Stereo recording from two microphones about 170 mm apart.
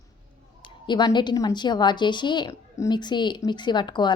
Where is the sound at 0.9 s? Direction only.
25° left (ahead or behind).